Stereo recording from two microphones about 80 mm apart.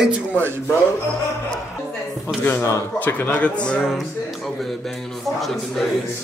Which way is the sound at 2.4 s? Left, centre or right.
Left.